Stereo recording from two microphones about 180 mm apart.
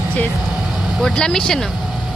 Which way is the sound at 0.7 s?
Centre (ahead or behind).